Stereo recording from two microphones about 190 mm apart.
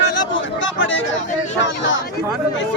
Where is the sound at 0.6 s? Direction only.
85° left.